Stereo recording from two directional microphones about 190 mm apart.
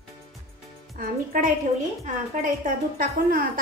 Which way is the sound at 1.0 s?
50° right (ahead or behind).